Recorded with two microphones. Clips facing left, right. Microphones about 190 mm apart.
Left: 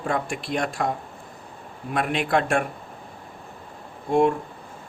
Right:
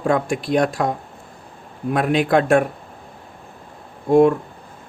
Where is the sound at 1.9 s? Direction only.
40° right (ahead or behind).